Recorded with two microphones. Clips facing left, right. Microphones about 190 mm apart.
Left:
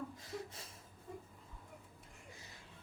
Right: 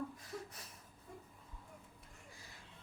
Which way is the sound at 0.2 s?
25° left (ahead or behind).